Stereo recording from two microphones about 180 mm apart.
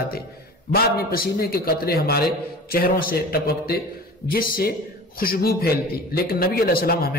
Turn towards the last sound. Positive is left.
turn(degrees=60)  # may be behind; listen again after turning